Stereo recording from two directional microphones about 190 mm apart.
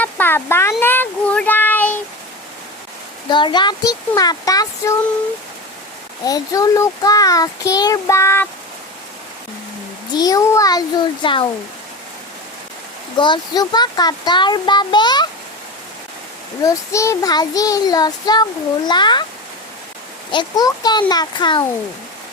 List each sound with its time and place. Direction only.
0.0 s child singing: 10° left (ahead or behind)
3.2 s a child's voice: 25° left (ahead or behind)
6.2 s a child's voice: 20° left (ahead or behind)
10.2 s a child's voice: 20° left (ahead or behind)
13.1 s a child's voice: 25° left (ahead or behind)
16.6 s a child's voice: 15° left (ahead or behind)
20.3 s a child's voice: 20° left (ahead or behind)